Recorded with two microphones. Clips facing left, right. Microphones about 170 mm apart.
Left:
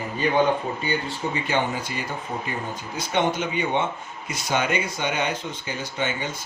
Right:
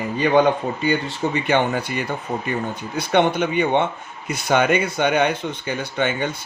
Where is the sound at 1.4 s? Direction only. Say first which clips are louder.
Right 6 dB; 65° right (ahead or behind).